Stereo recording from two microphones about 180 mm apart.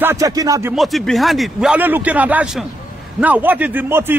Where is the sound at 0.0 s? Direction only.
15° right (ahead or behind).